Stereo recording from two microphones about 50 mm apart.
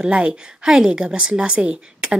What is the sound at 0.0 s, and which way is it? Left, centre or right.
A woman's voice, right.